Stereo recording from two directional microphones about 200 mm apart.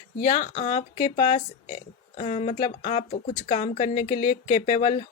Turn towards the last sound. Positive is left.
turn(degrees=35)  # may be behind; listen again after turning